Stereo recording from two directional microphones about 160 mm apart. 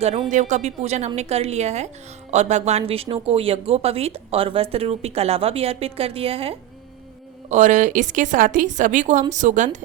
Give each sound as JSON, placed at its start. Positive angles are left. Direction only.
{"t": 0.0, "sound": "a woman's voice", "side_deg": -40}
{"t": 7.5, "sound": "a woman's voice", "side_deg": -50}